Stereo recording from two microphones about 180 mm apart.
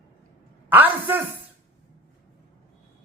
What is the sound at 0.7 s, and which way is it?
Speech, 10° right (ahead or behind).